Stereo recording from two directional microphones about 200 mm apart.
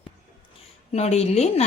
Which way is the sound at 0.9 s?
35° left (ahead or behind).